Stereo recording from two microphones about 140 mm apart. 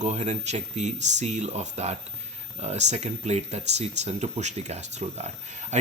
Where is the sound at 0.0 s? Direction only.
55° right (ahead or behind).